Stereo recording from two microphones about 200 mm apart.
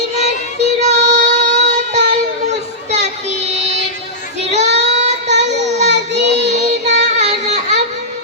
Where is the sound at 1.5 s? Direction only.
35° right (ahead or behind).